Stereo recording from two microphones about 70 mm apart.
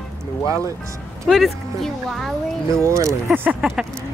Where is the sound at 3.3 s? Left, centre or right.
Right.